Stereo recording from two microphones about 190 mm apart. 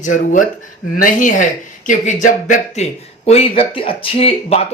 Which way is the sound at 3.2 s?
30° left (ahead or behind).